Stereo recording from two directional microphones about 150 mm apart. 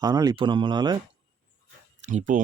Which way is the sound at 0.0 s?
25° right (ahead or behind).